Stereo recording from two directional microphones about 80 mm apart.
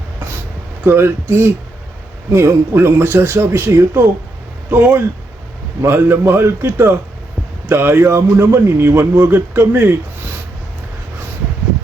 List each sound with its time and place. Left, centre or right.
0.9 s a man's voice: right